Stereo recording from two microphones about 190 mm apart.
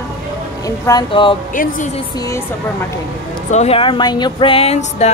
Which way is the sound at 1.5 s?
45° left (ahead or behind).